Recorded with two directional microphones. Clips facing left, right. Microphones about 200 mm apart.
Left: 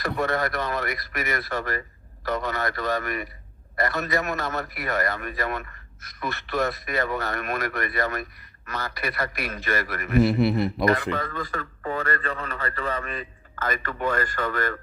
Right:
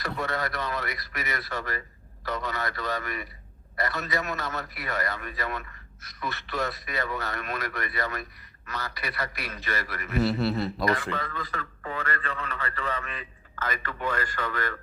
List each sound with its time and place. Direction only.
0.0 s a man's voice: 50° left (ahead or behind)
10.2 s a man's voice: 15° left (ahead or behind)
11.2 s a man's voice: 45° left (ahead or behind)